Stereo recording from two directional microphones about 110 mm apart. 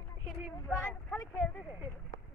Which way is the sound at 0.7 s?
5° right (ahead or behind).